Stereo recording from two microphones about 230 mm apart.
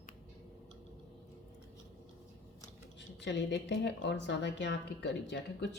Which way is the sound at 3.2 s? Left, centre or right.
Left.